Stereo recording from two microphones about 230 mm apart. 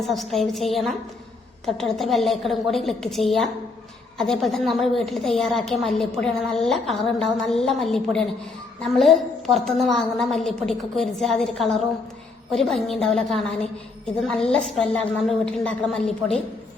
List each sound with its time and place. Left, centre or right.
0.0 s a woman's voice: centre